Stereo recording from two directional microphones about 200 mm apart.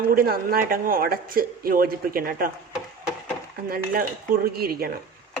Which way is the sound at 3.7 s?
45° right (ahead or behind).